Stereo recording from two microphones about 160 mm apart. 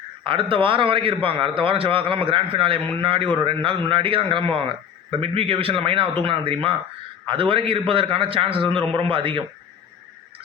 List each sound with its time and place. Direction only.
0.3 s a man's voice: 35° right (ahead or behind)